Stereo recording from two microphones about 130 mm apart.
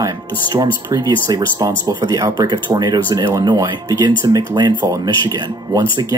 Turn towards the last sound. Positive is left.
turn(degrees=-30)  # may be behind; listen again after turning